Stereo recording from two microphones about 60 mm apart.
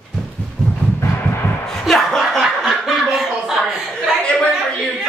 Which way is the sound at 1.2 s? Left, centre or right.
Left.